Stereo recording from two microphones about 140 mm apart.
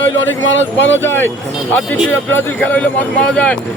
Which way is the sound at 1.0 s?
15° left (ahead or behind).